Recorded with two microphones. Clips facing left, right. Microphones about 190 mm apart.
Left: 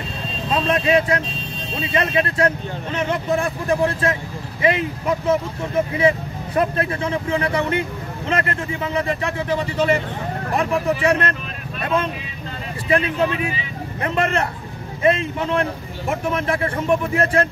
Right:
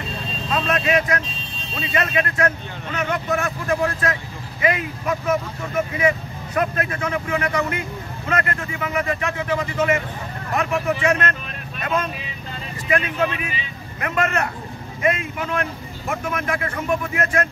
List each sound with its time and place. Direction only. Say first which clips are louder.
0.5 s speech: left 3 dB; 30° left (ahead or behind)
12.9 s speech: left 3 dB; 30° left (ahead or behind)